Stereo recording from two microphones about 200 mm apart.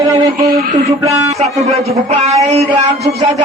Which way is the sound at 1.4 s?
35° right (ahead or behind).